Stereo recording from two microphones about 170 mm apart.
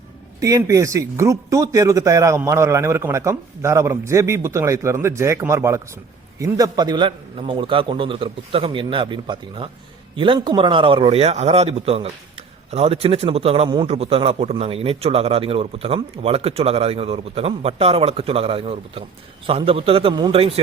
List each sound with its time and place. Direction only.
0.3 s a man's voice: 20° right (ahead or behind)